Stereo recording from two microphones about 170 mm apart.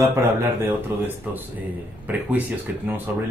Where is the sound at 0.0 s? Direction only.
15° right (ahead or behind).